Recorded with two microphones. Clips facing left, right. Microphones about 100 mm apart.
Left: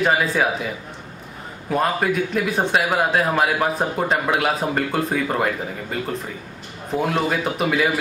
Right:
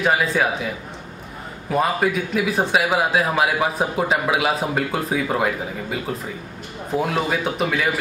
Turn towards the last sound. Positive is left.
turn(degrees=0)  # may be behind; listen again after turning